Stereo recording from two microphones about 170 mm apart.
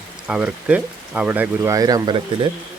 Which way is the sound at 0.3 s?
5° right (ahead or behind).